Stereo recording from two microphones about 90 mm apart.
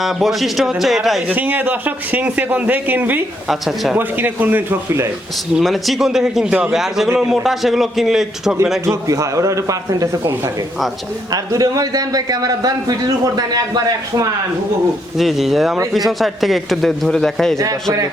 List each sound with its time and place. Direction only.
0.0 s a man's voice: centre (ahead or behind)
1.3 s speech: 20° right (ahead or behind)
5.5 s a man's voice: centre (ahead or behind)
8.9 s a man's voice: 40° right (ahead or behind)
15.2 s a man's voice: centre (ahead or behind)